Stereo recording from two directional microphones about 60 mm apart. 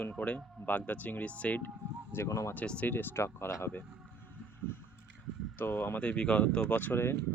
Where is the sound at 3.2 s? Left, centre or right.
Left.